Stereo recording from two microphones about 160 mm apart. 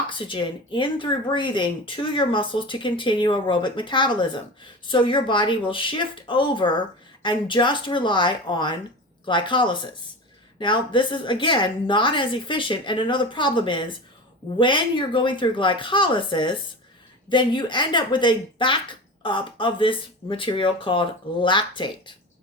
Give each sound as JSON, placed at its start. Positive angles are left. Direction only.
{"t": 0.1, "sound": "speech", "side_deg": 30}